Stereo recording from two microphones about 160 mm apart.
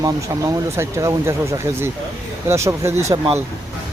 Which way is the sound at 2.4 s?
15° right (ahead or behind).